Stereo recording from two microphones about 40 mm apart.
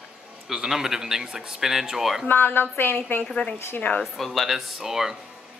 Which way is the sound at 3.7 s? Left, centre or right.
Left.